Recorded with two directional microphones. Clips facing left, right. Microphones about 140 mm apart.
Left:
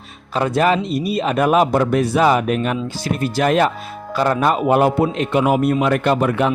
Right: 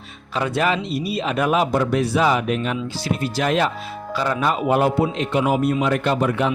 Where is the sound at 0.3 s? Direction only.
45° left (ahead or behind).